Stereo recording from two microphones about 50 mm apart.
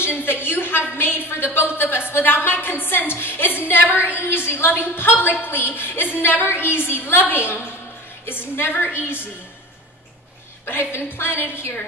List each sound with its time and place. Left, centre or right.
0.0 s a woman's voice: left
10.6 s a woman's voice: left